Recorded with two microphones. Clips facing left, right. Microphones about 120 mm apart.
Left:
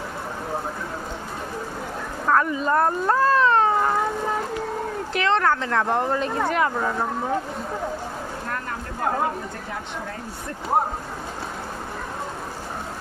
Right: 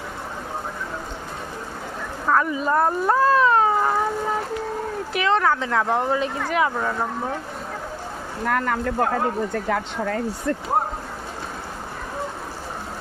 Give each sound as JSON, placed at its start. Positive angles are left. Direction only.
{"t": 2.2, "sound": "vehicle", "side_deg": 0}
{"t": 2.5, "sound": "cat", "side_deg": -5}
{"t": 5.1, "sound": "speech", "side_deg": -5}
{"t": 8.4, "sound": "speech", "side_deg": -90}